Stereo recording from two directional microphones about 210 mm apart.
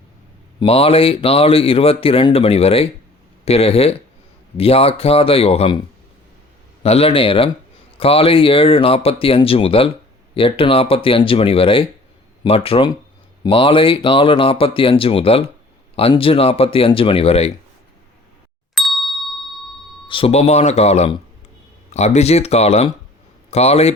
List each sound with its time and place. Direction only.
0.6 s speech: 25° left (ahead or behind)
6.8 s speech: 30° left (ahead or behind)
18.7 s ding: centre (ahead or behind)
20.1 s speech: 25° left (ahead or behind)